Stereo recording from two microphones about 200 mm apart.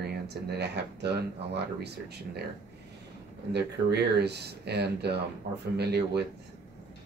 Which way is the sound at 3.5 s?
55° right (ahead or behind).